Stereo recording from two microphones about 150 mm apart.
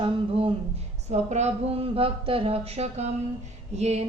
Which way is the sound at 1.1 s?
50° right (ahead or behind).